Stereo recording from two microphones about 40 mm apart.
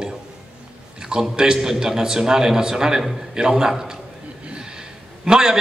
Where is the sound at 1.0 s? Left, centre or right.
Centre.